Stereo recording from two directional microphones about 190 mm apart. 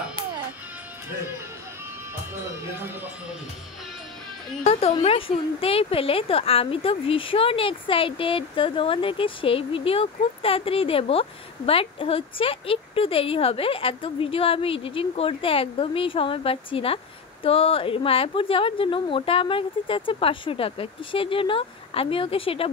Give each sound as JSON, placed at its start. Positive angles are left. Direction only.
{"t": 2.3, "sound": "speech", "side_deg": -10}
{"t": 4.7, "sound": "speech", "side_deg": 30}